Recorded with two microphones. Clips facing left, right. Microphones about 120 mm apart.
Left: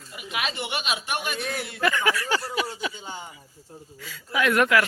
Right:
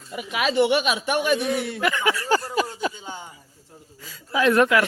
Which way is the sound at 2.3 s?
40° right (ahead or behind).